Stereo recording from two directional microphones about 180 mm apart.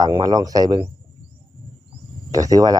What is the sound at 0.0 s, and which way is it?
Speech, 20° right (ahead or behind).